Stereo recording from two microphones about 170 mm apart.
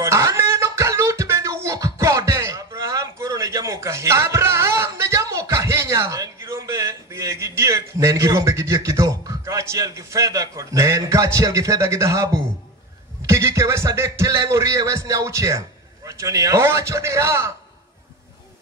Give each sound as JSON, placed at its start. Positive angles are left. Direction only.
{"t": 0.0, "sound": "beatboxing", "side_deg": -15}
{"t": 13.3, "sound": "a man's voice", "side_deg": -15}